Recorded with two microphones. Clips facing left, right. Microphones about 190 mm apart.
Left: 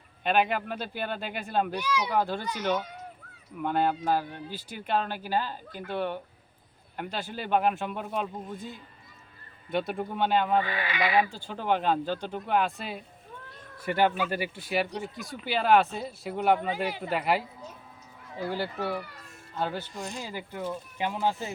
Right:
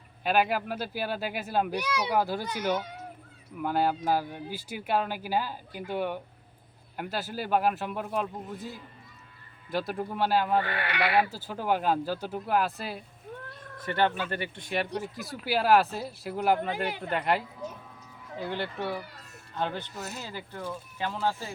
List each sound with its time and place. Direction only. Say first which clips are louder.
0.3 s speech: even; 5° right (ahead or behind)
3.6 s speech: even; 5° right (ahead or behind)
10.6 s speech: even; 65° right (ahead or behind)
11.2 s speech: even; 5° right (ahead or behind)
13.7 s speech: left 2 dB; 10° left (ahead or behind)
18.4 s speech: left 2 dB; 5° left (ahead or behind)
19.9 s speech: left 2 dB; 5° right (ahead or behind)
20.2 s speech: left 3 dB; 15° left (ahead or behind)